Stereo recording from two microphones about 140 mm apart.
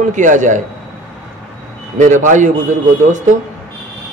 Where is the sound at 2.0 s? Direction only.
60° right (ahead or behind).